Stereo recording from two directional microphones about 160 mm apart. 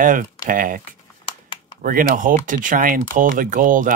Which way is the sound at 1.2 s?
30° left (ahead or behind).